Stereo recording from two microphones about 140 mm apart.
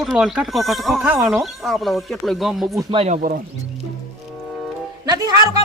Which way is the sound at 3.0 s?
70° right (ahead or behind).